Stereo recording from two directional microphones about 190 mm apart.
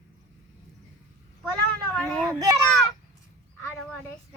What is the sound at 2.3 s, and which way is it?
Children playing, 20° right (ahead or behind).